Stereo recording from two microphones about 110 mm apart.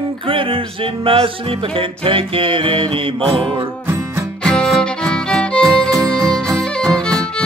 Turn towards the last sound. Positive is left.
turn(degrees=10)  # may be behind; listen again after turning